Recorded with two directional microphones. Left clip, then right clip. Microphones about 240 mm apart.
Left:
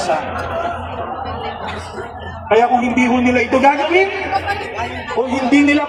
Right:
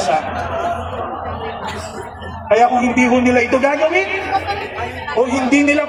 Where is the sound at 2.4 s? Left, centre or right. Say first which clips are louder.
Even; right.